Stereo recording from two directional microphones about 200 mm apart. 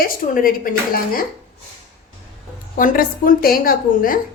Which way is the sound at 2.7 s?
45° left (ahead or behind).